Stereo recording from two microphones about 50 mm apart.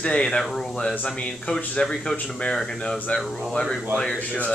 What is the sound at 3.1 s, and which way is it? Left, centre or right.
Speech, left.